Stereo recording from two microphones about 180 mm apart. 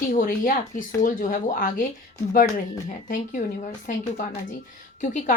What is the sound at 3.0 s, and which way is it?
Speech, 45° left (ahead or behind).